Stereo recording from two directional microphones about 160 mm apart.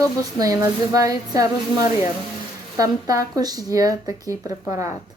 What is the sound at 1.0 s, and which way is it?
Speech, 20° right (ahead or behind).